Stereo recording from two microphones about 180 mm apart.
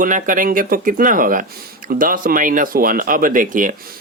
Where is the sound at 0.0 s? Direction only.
45° right (ahead or behind).